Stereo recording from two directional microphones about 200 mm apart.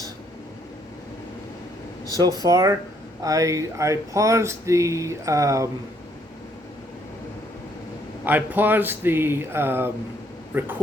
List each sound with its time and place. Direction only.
2.4 s speech: 15° right (ahead or behind)
8.2 s speech: 10° right (ahead or behind)